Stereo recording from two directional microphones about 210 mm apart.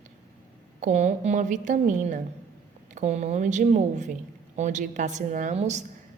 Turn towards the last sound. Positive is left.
turn(degrees=-35)  # may be behind; listen again after turning